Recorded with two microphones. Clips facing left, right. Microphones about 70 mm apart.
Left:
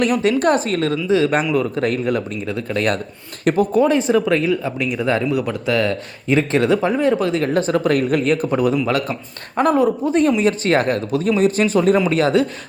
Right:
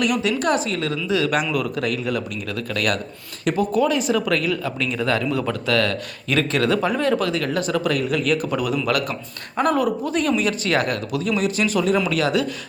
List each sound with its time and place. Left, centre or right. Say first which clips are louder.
0.0 s speech: left 5 dB; left
1.0 s speech: left 4 dB; left
2.5 s speech: left 3 dB; left
3.4 s speech: left 4 dB; left
3.8 s speech: left 4 dB; left